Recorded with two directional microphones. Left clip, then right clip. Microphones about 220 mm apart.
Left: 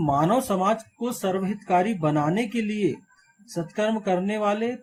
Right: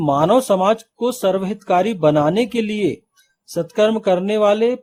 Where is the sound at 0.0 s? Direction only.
50° right (ahead or behind).